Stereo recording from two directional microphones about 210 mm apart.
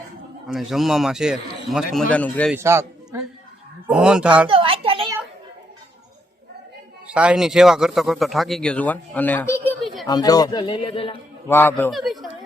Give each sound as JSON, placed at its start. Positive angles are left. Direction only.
{"t": 0.4, "sound": "speech", "side_deg": 0}
{"t": 2.5, "sound": "speech", "side_deg": -10}
{"t": 4.4, "sound": "a sound", "side_deg": -25}
{"t": 7.1, "sound": "speech", "side_deg": -5}
{"t": 10.1, "sound": "speech", "side_deg": 20}
{"t": 11.4, "sound": "a man's voice", "side_deg": 10}